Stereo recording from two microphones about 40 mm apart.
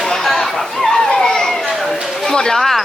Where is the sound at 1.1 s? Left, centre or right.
Centre.